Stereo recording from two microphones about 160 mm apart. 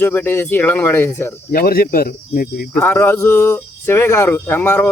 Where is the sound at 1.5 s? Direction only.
70° left (ahead or behind).